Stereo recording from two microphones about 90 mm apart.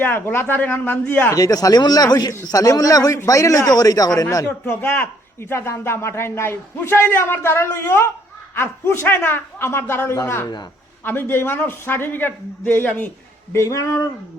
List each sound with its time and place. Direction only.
0.0 s speech: 25° left (ahead or behind)
1.3 s speech: 45° left (ahead or behind)
4.4 s speech: 25° left (ahead or behind)
13.5 s speech: 35° left (ahead or behind)